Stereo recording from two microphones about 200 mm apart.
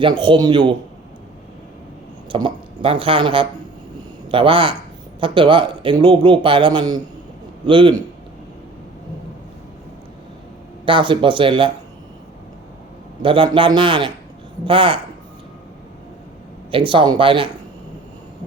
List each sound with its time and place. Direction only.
0.0 s speech: 25° right (ahead or behind)
2.3 s speech: 25° right (ahead or behind)
10.8 s speech: 25° right (ahead or behind)
13.2 s speech: 25° right (ahead or behind)
16.7 s speech: 25° right (ahead or behind)